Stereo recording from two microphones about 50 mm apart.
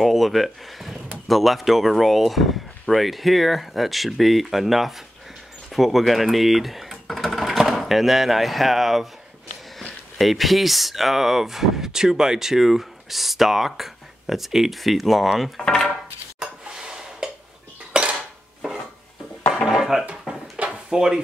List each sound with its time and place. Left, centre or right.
0.0 s speech: centre
10.1 s speech: centre
15.6 s speech: centre
15.9 s a sound: centre
17.9 s dishes: centre
19.6 s dishes: centre
20.5 s drawer open or close: centre